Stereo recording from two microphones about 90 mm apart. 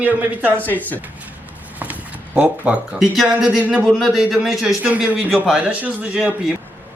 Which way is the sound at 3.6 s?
20° right (ahead or behind).